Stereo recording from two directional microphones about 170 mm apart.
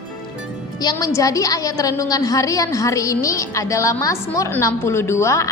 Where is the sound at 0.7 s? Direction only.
20° left (ahead or behind).